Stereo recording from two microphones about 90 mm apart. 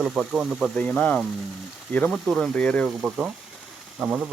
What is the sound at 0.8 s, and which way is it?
Speech, 15° left (ahead or behind).